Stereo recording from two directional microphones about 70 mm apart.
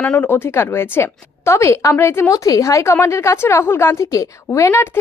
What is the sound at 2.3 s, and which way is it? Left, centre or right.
A woman's voice, left.